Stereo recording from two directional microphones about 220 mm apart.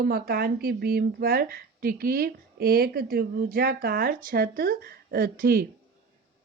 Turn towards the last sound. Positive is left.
turn(degrees=-40)  # may be behind; listen again after turning